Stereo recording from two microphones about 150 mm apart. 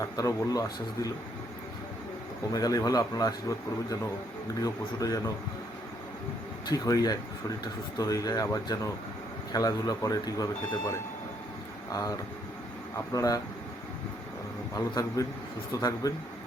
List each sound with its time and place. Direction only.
0.0 s speech: 25° left (ahead or behind)
2.5 s speech: 25° left (ahead or behind)
4.6 s speech: 25° left (ahead or behind)
6.7 s speech: 25° left (ahead or behind)
14.8 s speech: 25° left (ahead or behind)